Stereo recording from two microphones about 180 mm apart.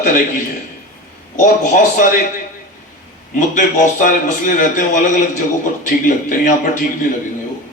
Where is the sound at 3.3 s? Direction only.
45° left (ahead or behind).